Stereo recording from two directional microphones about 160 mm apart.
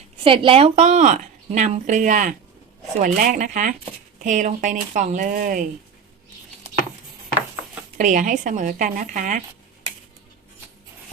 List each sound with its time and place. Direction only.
0.3 s a woman's voice: 35° right (ahead or behind); by 5.6 s 60° right (ahead or behind)
7.9 s a woman's voice: 55° right (ahead or behind)